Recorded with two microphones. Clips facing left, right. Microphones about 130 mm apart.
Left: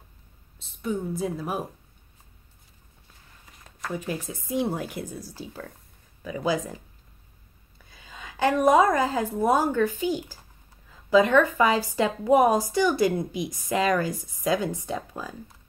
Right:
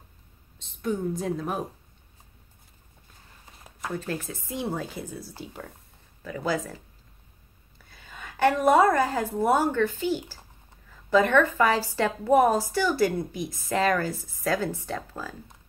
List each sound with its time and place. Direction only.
0.6 s speech: 5° left (ahead or behind)
3.9 s a woman's voice: 15° left (ahead or behind)
7.9 s a sound: 15° left (ahead or behind)
9.4 s a woman's voice: 15° left (ahead or behind)